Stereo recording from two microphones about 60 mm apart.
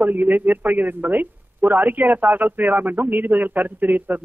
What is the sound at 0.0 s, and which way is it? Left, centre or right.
A man's voice, right.